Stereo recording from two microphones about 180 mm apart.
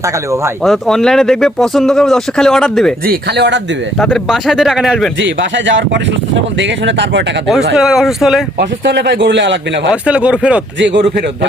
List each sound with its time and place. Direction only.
0.6 s speech: centre (ahead or behind)
3.1 s speech: 70° right (ahead or behind)
4.0 s speech: centre (ahead or behind)
5.2 s speech: 90° right
7.8 s speech: centre (ahead or behind)
8.5 s speech: 75° right (ahead or behind)
9.9 s speech: 5° right (ahead or behind)
10.8 s speech: 85° right